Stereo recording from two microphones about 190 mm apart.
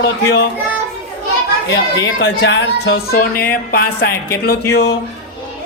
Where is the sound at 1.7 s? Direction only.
70° left (ahead or behind); by 4.1 s 50° left (ahead or behind).